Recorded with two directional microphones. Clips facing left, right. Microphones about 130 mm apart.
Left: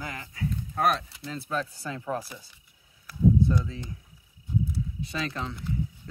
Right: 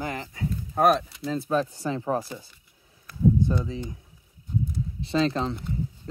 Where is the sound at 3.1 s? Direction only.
20° right (ahead or behind).